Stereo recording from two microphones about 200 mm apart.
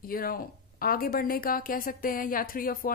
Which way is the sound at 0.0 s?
45° left (ahead or behind).